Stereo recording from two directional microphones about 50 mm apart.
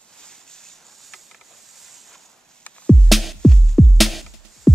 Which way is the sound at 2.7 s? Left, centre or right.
Left.